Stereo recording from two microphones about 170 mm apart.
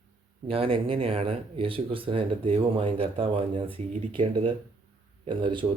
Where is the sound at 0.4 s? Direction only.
35° right (ahead or behind).